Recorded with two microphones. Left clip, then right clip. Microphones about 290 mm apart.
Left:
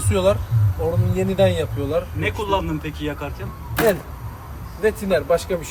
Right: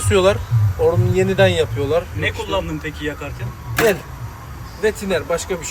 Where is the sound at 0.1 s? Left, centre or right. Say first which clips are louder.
Right 4 dB; right.